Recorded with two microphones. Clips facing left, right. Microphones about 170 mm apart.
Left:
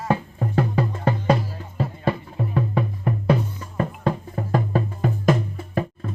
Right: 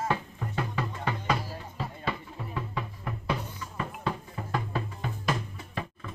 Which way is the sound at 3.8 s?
45° left (ahead or behind).